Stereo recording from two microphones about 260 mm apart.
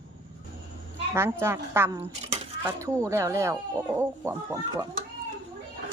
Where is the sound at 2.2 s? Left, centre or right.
Right.